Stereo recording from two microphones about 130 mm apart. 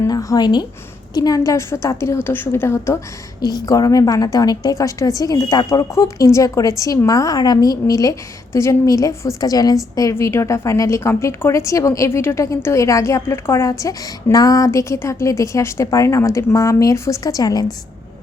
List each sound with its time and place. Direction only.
0.0 s a woman's voice: 25° left (ahead or behind)